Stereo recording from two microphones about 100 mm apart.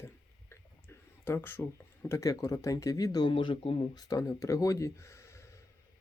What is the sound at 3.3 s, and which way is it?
Speech, 60° left (ahead or behind).